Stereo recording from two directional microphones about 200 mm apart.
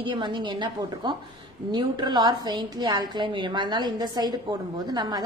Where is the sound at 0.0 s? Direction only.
20° right (ahead or behind).